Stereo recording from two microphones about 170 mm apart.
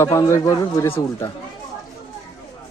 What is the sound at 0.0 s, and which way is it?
Speech, 15° left (ahead or behind).